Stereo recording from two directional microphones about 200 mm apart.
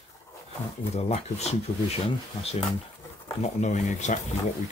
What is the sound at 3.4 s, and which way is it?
Speech, 35° left (ahead or behind).